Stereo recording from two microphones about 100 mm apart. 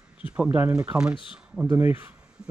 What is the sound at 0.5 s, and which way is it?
Speech, 15° right (ahead or behind).